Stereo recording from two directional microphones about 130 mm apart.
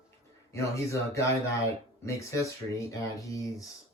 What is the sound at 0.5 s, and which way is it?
Speech, 25° left (ahead or behind).